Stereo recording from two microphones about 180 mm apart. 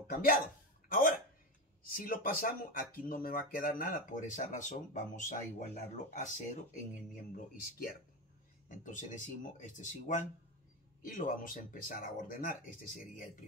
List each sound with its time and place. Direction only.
0.1 s speech: 55° left (ahead or behind)
8.6 s speech: 45° left (ahead or behind)